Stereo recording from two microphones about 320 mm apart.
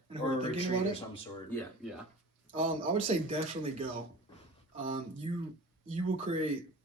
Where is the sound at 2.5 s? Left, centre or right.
Right.